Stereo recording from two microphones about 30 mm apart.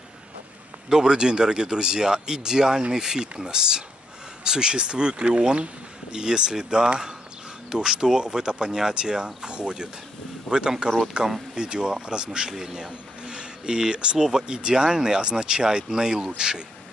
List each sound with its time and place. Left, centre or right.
0.8 s speech: right
10.9 s speech: right; by 12.9 s centre
13.3 s a sound: right
14.1 s speech: right